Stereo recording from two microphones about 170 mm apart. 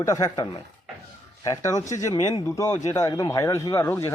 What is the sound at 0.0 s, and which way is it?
Speech, 20° left (ahead or behind).